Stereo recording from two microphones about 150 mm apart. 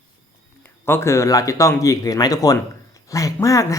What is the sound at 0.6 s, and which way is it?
Speech, 15° left (ahead or behind).